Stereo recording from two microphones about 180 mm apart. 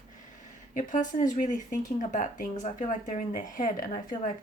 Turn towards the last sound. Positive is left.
turn(degrees=45)  # may be behind; listen again after turning